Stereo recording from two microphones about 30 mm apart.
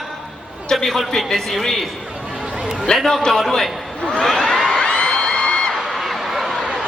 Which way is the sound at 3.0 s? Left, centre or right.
Centre.